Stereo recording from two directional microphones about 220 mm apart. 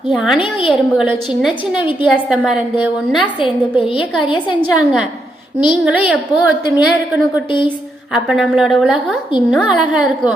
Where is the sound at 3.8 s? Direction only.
25° left (ahead or behind).